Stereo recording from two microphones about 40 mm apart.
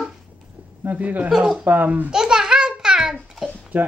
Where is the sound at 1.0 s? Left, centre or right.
Right.